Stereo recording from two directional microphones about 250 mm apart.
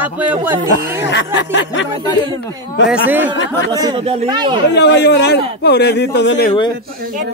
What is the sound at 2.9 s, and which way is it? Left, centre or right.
Speech, centre.